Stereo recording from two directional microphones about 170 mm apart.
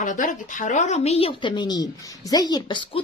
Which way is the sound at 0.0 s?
50° left (ahead or behind).